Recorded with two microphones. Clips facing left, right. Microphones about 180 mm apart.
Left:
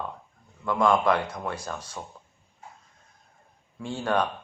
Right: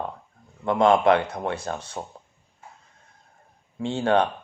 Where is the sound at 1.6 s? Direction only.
25° right (ahead or behind).